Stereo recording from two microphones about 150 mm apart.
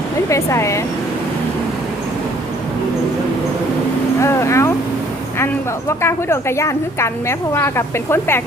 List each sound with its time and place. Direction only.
0.3 s speech: 20° left (ahead or behind)
4.2 s speech: 20° left (ahead or behind)
6.0 s a woman's voice: 15° left (ahead or behind)